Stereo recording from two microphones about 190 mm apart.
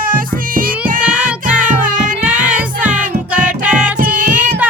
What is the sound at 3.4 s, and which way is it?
Music, 45° right (ahead or behind).